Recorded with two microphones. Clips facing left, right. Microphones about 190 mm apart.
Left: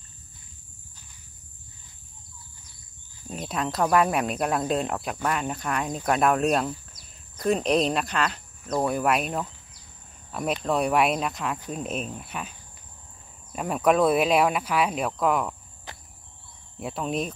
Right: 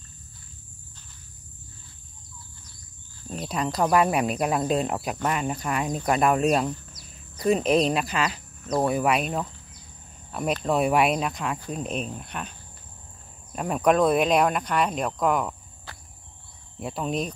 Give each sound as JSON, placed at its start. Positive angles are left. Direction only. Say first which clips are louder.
{"t": 3.3, "sound": "speech", "louder": "right 1 dB", "side_deg": 0}
{"t": 15.9, "sound": "cricket", "louder": "left 2 dB", "side_deg": 20}
{"t": 16.8, "sound": "speech", "louder": "even", "side_deg": 0}